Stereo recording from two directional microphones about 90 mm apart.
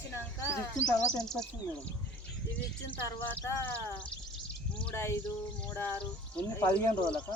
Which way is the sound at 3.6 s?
15° left (ahead or behind).